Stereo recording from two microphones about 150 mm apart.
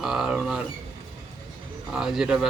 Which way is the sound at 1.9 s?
5° right (ahead or behind).